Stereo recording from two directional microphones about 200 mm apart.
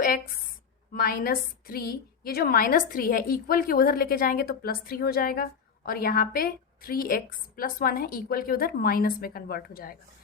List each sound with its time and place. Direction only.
0.9 s a woman's voice: 50° left (ahead or behind)